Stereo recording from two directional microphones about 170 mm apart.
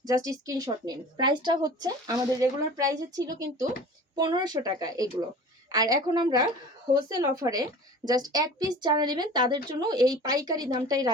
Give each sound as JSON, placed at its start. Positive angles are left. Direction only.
{"t": 0.0, "sound": "a woman's voice", "side_deg": -20}